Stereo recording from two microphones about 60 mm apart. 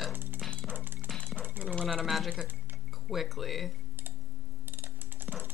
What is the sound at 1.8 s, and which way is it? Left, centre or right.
Sewing machine, centre.